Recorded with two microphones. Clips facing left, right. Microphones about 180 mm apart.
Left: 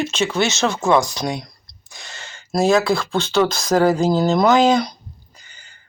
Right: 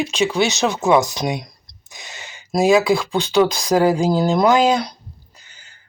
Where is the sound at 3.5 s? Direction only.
15° right (ahead or behind).